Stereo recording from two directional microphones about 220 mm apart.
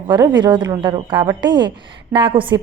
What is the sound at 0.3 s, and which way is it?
A woman's voice, 20° right (ahead or behind).